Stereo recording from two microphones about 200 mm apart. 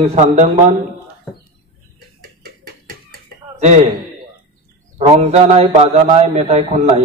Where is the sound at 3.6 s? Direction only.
35° right (ahead or behind).